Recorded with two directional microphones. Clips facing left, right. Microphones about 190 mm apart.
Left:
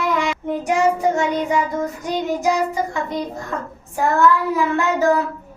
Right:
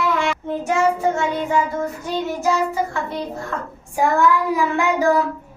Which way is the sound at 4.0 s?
15° right (ahead or behind).